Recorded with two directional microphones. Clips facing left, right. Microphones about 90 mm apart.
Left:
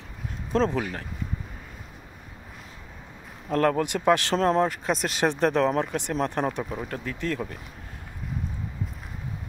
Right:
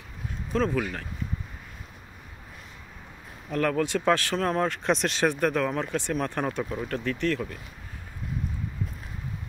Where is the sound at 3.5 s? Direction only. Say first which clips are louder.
Left 4 dB; 35° left (ahead or behind).